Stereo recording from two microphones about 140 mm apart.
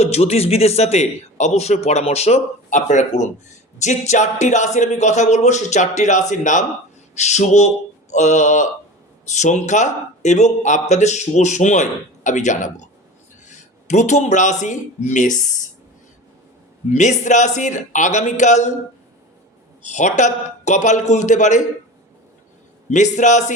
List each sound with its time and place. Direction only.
0.0 s a man's voice: 50° left (ahead or behind); by 15.7 s 65° left (ahead or behind)
16.9 s speech: 55° left (ahead or behind)
19.8 s speech: 60° left (ahead or behind)
22.9 s speech: 60° left (ahead or behind)